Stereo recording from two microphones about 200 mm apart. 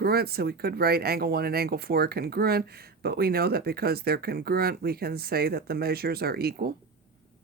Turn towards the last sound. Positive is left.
turn(degrees=-50)  # may be behind; listen again after turning